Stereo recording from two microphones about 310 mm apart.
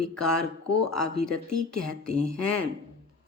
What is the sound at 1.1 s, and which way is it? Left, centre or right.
Speech, right.